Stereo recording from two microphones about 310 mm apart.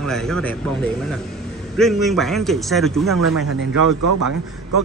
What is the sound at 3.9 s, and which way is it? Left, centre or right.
Speech, right.